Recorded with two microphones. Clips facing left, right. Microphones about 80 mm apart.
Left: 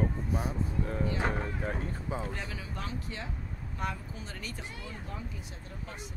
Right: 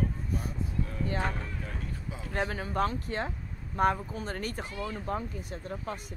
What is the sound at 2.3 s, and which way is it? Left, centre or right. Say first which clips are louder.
Speech: right 8 dB; right.